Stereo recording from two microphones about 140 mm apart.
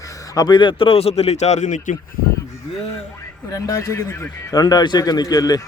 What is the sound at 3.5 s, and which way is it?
Speech, 25° left (ahead or behind).